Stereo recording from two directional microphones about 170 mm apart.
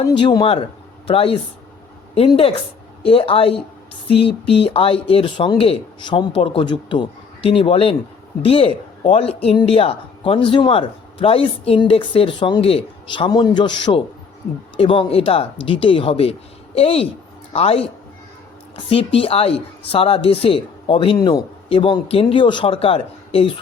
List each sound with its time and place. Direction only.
0.1 s speech: 25° left (ahead or behind)
18.9 s speech: 35° left (ahead or behind)